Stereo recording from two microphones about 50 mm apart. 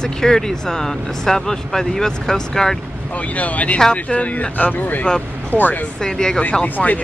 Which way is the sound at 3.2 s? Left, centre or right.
Left.